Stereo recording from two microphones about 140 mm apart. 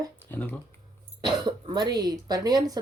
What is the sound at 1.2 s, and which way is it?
Speech, 30° right (ahead or behind).